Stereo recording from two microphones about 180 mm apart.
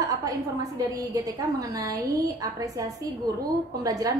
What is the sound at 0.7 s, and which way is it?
A woman's voice, 20° right (ahead or behind).